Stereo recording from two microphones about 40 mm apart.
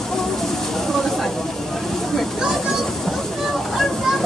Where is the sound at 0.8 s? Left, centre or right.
Centre.